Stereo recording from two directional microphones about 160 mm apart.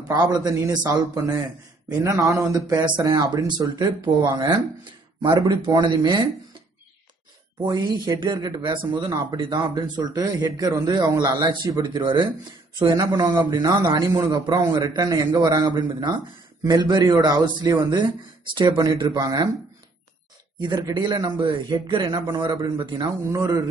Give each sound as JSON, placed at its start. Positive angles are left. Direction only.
{"t": 0.1, "sound": "a man's voice", "side_deg": -20}
{"t": 7.6, "sound": "a man's voice", "side_deg": -25}
{"t": 20.5, "sound": "a man's voice", "side_deg": -25}
{"t": 23.3, "sound": "a man's voice", "side_deg": -20}